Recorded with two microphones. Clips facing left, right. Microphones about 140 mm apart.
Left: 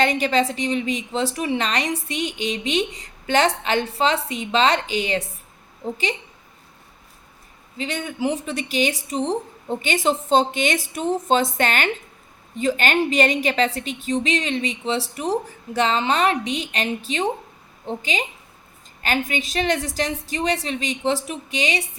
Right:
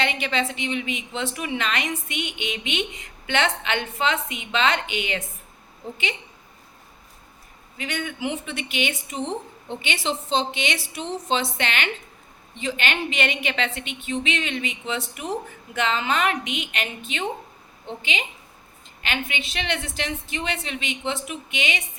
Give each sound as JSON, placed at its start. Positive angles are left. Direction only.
{"t": 0.0, "sound": "a woman's voice", "side_deg": 40}
{"t": 7.8, "sound": "a woman's voice", "side_deg": 35}